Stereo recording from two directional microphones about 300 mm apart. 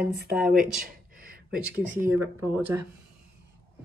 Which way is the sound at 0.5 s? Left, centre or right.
Right.